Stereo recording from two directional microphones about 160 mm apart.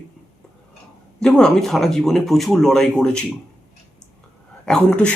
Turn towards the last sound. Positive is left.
turn(degrees=5)  # may be behind; listen again after turning